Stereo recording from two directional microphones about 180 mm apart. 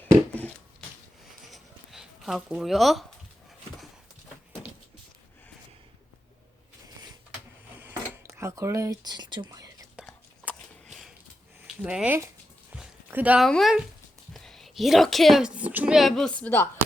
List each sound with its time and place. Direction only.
0.0 s a sound: 10° left (ahead or behind)
7.8 s dishes: 15° right (ahead or behind)
10.0 s whispering: 5° right (ahead or behind)
11.8 s speech: 5° right (ahead or behind)
12.7 s a sound: 10° right (ahead or behind)
13.5 s a woman's voice: centre (ahead or behind)